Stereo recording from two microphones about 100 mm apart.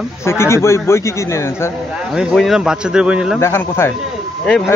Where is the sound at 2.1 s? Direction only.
5° right (ahead or behind).